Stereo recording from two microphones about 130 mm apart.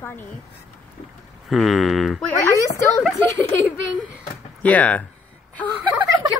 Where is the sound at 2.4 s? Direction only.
25° left (ahead or behind).